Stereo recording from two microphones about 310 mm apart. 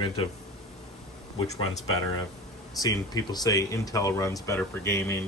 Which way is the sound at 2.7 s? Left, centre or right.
Centre.